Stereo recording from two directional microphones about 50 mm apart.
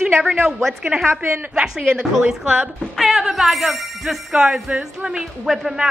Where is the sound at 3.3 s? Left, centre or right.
Centre.